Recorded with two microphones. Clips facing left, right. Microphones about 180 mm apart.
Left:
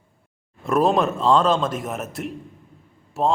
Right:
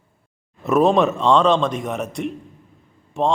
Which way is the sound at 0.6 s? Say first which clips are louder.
Right 3 dB; centre (ahead or behind).